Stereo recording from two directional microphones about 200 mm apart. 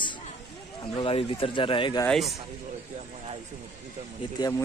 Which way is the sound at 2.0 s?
Centre (ahead or behind).